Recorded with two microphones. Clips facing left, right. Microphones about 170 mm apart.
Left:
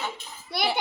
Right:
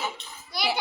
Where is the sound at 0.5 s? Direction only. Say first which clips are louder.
Left 3 dB; 65° left (ahead or behind).